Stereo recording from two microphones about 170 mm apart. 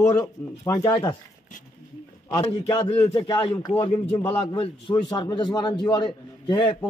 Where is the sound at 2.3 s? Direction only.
20° left (ahead or behind).